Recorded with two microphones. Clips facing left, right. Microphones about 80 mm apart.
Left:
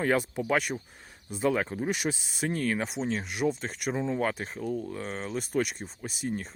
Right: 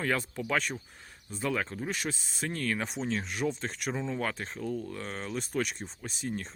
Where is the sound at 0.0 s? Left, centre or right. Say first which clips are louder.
Left 5 dB; centre.